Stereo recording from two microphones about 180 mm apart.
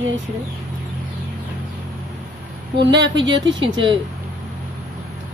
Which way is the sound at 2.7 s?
75° right (ahead or behind).